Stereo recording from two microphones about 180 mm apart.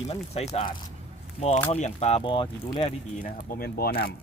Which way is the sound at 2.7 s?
45° left (ahead or behind).